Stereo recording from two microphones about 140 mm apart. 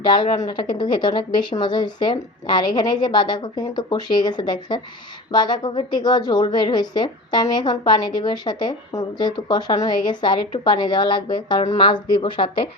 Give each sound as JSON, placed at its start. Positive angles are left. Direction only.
{"t": 0.0, "sound": "a woman's voice", "side_deg": 35}